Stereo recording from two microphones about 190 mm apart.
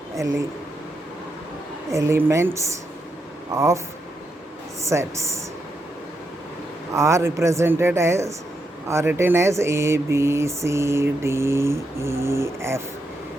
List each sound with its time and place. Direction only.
1.9 s speech: 15° right (ahead or behind)
4.8 s speech: 15° right (ahead or behind)
6.9 s speech: 15° right (ahead or behind)